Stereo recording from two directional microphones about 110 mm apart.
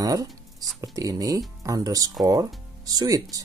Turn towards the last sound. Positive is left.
turn(degrees=-35)  # may be behind; listen again after turning